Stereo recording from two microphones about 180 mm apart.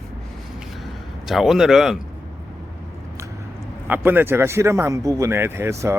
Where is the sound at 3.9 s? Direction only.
10° right (ahead or behind).